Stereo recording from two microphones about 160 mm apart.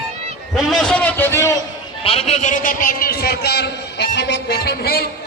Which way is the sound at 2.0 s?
35° left (ahead or behind).